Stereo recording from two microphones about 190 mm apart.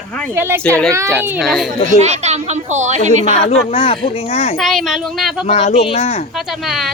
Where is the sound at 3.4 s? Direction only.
30° left (ahead or behind).